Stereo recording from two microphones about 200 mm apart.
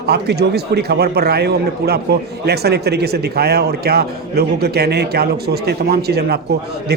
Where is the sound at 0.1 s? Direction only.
55° right (ahead or behind).